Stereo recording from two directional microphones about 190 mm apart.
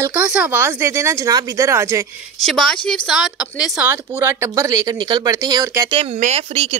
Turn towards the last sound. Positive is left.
turn(degrees=-30)  # may be behind; listen again after turning